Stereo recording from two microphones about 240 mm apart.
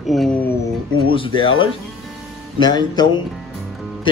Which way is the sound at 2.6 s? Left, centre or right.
Centre.